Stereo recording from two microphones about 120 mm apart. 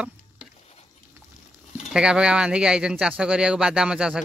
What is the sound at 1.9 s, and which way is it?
Speech, 5° right (ahead or behind).